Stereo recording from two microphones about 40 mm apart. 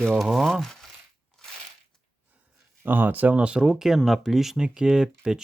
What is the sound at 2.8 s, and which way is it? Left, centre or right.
Speech, right.